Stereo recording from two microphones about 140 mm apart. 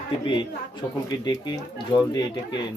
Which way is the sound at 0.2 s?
35° left (ahead or behind).